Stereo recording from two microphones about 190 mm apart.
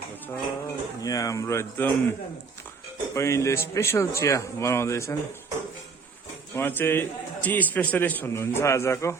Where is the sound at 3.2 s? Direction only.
15° left (ahead or behind).